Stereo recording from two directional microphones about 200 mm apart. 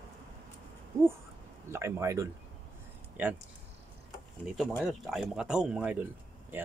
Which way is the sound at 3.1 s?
10° right (ahead or behind).